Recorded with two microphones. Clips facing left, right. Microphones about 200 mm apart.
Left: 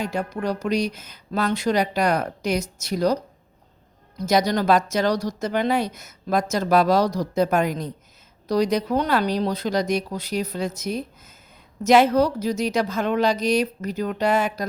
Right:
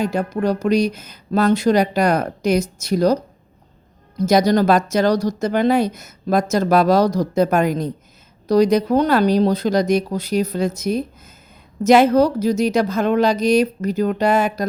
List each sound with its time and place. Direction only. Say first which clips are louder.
0.0 s a woman's voice: right 6 dB; 40° right (ahead or behind)
4.3 s a woman's voice: right 4 dB; 40° right (ahead or behind)